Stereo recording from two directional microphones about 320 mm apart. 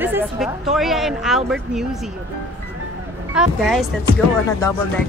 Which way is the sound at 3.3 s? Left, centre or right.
Centre.